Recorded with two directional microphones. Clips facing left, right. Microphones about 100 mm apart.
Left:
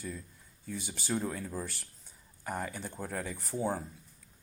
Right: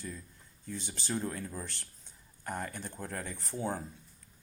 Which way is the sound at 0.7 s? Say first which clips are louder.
Left 2 dB; 10° left (ahead or behind).